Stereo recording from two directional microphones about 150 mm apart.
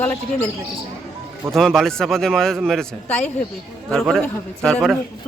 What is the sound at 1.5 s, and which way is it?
Speech, centre (ahead or behind).